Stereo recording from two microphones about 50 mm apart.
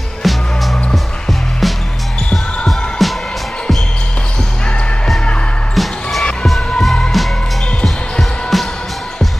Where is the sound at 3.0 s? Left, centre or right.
Centre.